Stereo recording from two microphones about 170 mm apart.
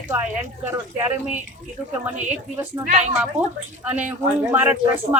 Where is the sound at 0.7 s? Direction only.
15° right (ahead or behind).